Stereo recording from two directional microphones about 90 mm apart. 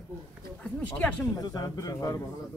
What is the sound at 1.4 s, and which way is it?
Speech, 45° left (ahead or behind).